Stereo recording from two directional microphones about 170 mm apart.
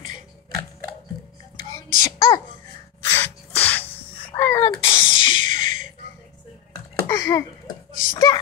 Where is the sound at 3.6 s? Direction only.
10° left (ahead or behind).